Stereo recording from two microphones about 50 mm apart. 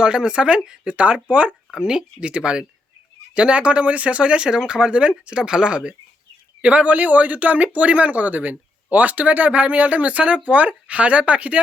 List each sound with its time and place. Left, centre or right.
0.0 s speech: centre